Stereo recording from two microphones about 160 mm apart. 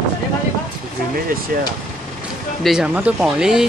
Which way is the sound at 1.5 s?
65° right (ahead or behind).